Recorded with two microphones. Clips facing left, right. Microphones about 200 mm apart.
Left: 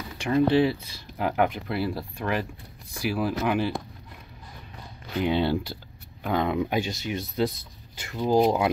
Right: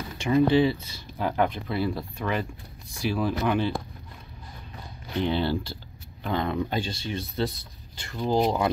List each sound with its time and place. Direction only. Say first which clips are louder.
0.3 s speech: right 1 dB; 5° left (ahead or behind)
5.2 s speech: left 2 dB; 20° left (ahead or behind)